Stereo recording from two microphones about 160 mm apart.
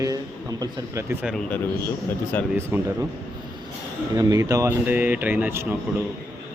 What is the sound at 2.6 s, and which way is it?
Speech, 15° right (ahead or behind).